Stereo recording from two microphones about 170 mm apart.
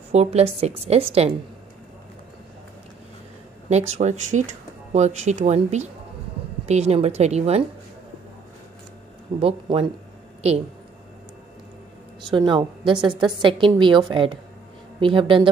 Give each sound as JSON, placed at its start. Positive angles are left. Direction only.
{"t": 0.1, "sound": "a woman's voice", "side_deg": -40}
{"t": 3.6, "sound": "a woman's voice", "side_deg": -40}
{"t": 9.4, "sound": "a woman's voice", "side_deg": -35}
{"t": 12.3, "sound": "a woman's voice", "side_deg": -25}